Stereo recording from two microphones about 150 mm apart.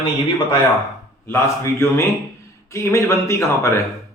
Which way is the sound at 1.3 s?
15° left (ahead or behind).